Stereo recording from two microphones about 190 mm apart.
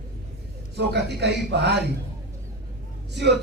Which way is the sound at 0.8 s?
65° right (ahead or behind).